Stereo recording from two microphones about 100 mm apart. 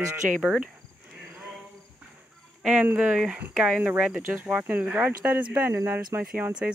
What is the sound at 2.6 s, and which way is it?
Speech, 5° right (ahead or behind).